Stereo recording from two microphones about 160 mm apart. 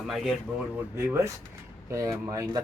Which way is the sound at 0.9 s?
15° right (ahead or behind).